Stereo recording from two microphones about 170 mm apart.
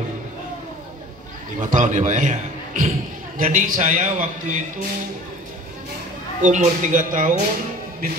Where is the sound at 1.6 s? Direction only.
50° right (ahead or behind).